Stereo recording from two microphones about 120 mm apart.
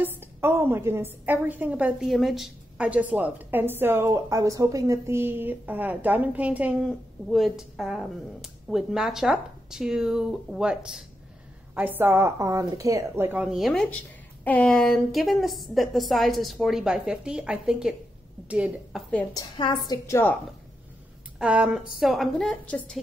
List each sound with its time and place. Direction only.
0.0 s a woman's voice: 20° right (ahead or behind)
2.0 s a woman's voice: centre (ahead or behind); by 13.4 s 20° right (ahead or behind)
13.4 s a woman's voice: 5° right (ahead or behind)
14.4 s a woman's voice: 10° left (ahead or behind); by 19.0 s 10° right (ahead or behind)
19.3 s a woman's voice: 40° left (ahead or behind)
20.1 s a woman's voice: 20° left (ahead or behind)
21.4 s a woman's voice: 10° right (ahead or behind)